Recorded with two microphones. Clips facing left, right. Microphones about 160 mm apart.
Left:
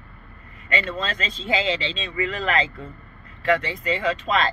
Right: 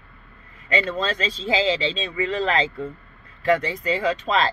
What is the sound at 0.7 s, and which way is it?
Speech, 35° right (ahead or behind).